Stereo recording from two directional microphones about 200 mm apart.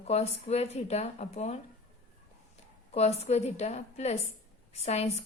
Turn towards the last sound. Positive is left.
turn(degrees=30)  # may be behind; listen again after turning